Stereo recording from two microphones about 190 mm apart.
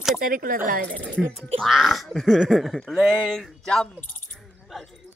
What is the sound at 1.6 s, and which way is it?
Speech, centre (ahead or behind).